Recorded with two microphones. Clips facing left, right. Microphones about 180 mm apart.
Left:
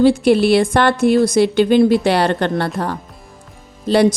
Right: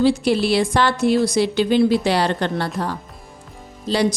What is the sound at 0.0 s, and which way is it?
A woman's voice, 55° left (ahead or behind).